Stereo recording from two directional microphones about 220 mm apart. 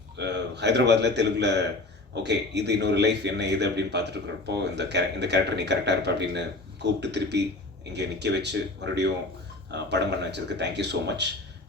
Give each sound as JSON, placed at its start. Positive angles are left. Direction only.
{"t": 0.2, "sound": "a man's voice", "side_deg": -50}